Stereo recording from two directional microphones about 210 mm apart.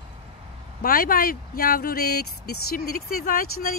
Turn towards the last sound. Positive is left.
turn(degrees=45)  # may be behind; listen again after turning